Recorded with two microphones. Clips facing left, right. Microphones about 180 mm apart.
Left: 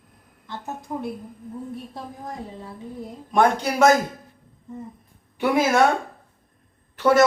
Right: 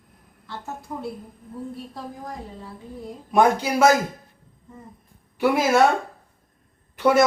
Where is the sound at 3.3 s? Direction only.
5° right (ahead or behind).